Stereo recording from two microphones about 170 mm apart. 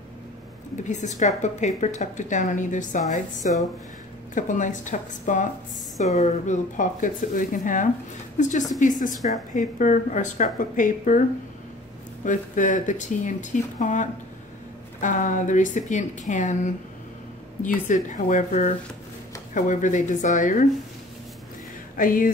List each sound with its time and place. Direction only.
0.8 s a woman's voice: 45° left (ahead or behind)
12.3 s a woman's voice: 50° left (ahead or behind)
21.9 s speech: 55° left (ahead or behind)